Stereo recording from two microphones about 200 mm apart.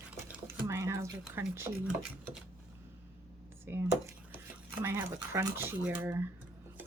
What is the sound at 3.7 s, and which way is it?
Speech, 10° right (ahead or behind).